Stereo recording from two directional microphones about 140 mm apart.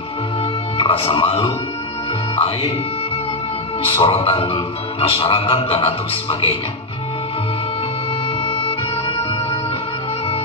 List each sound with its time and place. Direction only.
0.7 s speech: 40° left (ahead or behind)
4.0 s speech: 45° left (ahead or behind)
8.5 s music: 45° left (ahead or behind)